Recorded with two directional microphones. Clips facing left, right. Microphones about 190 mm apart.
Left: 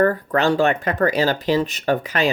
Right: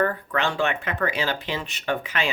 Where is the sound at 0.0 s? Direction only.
40° left (ahead or behind).